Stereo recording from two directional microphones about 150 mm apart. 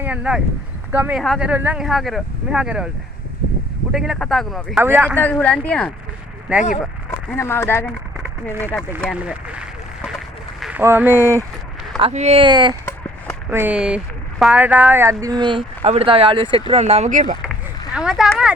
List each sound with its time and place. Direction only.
0.0 s speech: 10° right (ahead or behind)
3.9 s speech: centre (ahead or behind)
4.8 s speech: 10° right (ahead or behind)
5.1 s speech: 10° left (ahead or behind)
6.5 s speech: 10° right (ahead or behind)
7.1 s speech: 15° left (ahead or behind)
9.2 s a sound: 10° right (ahead or behind)
10.8 s speech: 10° right (ahead or behind)
11.9 s speech: 45° right (ahead or behind)
12.4 s speech: 30° right (ahead or behind)
13.5 s speech: 10° right (ahead or behind); by 17.3 s 60° right (ahead or behind)
17.9 s speech: 5° right (ahead or behind)